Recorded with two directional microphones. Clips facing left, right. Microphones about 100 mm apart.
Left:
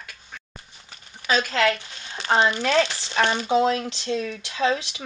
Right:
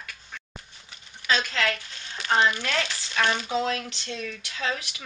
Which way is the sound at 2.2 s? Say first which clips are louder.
Left 2 dB; 30° left (ahead or behind).